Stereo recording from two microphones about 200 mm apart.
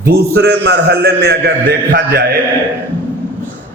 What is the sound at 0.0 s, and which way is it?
A man's voice, 55° right (ahead or behind).